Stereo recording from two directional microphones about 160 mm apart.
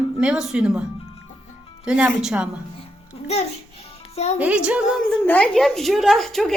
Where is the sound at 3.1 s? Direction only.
40° left (ahead or behind).